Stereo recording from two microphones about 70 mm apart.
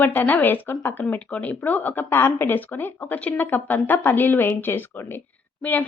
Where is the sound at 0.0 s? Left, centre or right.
Left.